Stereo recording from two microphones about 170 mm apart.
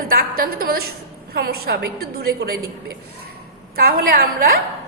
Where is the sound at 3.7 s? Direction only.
60° right (ahead or behind).